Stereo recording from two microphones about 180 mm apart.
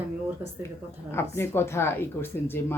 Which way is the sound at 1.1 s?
15° left (ahead or behind).